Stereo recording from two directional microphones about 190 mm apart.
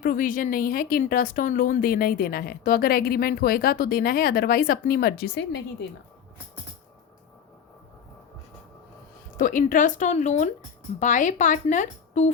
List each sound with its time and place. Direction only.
0.0 s speech: 45° left (ahead or behind)
9.4 s speech: 45° left (ahead or behind)